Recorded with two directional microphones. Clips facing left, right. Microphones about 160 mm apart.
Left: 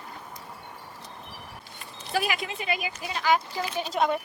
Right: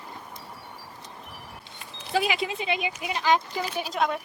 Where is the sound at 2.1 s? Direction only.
20° right (ahead or behind).